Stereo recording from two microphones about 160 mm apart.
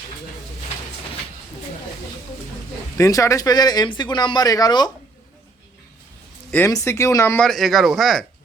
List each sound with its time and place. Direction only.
3.0 s speech: 20° left (ahead or behind)
6.5 s speech: 20° left (ahead or behind)
7.3 s speech: 5° left (ahead or behind)